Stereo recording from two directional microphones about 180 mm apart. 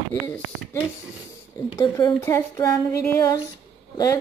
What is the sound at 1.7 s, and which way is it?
Speech, 20° left (ahead or behind).